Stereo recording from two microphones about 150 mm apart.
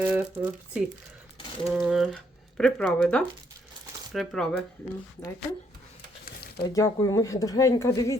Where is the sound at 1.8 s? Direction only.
Centre (ahead or behind).